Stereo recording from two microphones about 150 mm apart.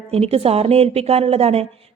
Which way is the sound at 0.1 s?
40° right (ahead or behind).